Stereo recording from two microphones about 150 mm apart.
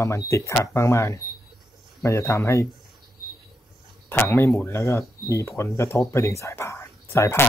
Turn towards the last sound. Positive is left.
turn(degrees=20)  # may be behind; listen again after turning